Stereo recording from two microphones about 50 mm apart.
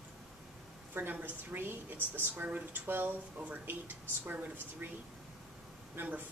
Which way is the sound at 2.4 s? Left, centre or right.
Right.